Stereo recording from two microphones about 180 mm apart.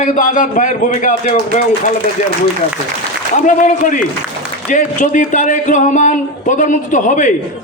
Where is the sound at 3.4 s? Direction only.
45° left (ahead or behind).